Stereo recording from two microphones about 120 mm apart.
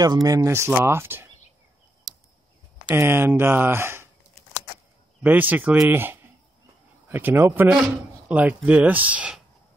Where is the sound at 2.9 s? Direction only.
20° right (ahead or behind).